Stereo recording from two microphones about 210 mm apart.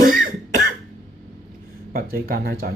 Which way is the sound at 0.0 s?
40° right (ahead or behind).